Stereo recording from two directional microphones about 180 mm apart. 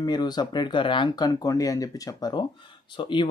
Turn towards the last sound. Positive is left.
turn(degrees=25)  # may be behind; listen again after turning